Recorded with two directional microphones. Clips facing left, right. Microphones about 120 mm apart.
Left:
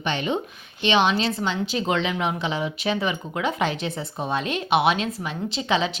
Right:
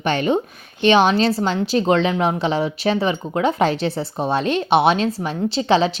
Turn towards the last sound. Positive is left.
turn(degrees=-35)  # may be behind; listen again after turning